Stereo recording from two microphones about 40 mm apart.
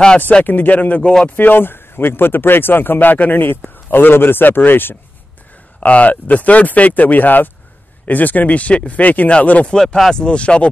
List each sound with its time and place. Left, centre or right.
0.5 s speech: left
1.3 s speech: left
5.8 s speech: left
9.7 s speech: centre